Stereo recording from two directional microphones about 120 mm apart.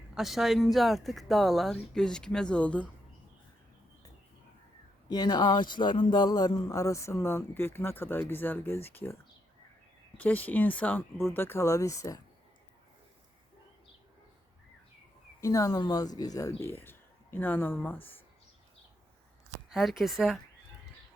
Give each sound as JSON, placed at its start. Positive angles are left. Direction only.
{"t": 0.1, "sound": "speech", "side_deg": 0}
{"t": 5.0, "sound": "a man's voice", "side_deg": 35}
{"t": 10.2, "sound": "a man's voice", "side_deg": 15}
{"t": 15.4, "sound": "a man's voice", "side_deg": 25}
{"t": 19.7, "sound": "speech", "side_deg": 0}